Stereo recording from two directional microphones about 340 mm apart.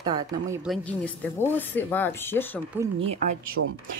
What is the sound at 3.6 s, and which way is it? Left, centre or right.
Speech, right.